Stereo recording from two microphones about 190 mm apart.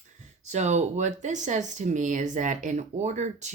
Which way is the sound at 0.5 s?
35° right (ahead or behind).